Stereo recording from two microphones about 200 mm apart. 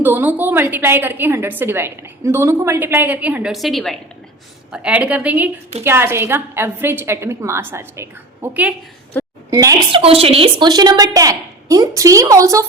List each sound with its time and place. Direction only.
0.0 s a woman's voice: 10° right (ahead or behind)
9.9 s a woman's voice: 30° right (ahead or behind)